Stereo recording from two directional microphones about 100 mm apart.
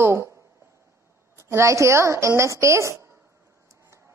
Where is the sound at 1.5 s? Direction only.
30° right (ahead or behind).